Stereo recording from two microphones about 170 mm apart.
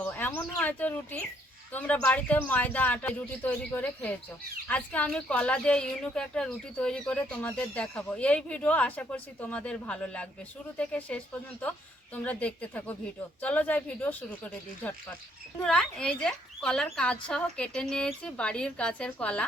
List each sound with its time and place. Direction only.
0.0 s speech: 15° left (ahead or behind)